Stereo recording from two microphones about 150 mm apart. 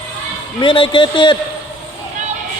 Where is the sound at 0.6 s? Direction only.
35° left (ahead or behind).